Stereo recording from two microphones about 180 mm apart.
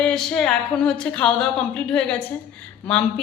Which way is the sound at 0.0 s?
5° left (ahead or behind).